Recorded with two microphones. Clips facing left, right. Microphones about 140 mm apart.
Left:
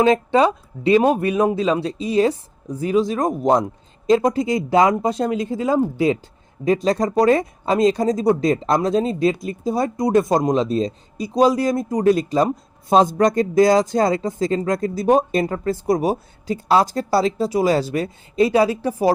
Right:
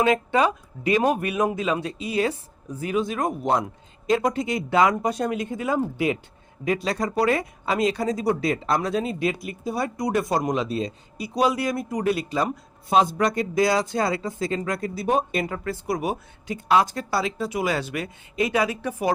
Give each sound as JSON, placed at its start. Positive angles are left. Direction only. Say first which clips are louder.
{"t": 0.0, "sound": "speech", "louder": "left 5 dB", "side_deg": 30}